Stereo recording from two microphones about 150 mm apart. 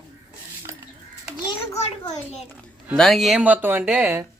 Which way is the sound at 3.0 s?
Centre (ahead or behind).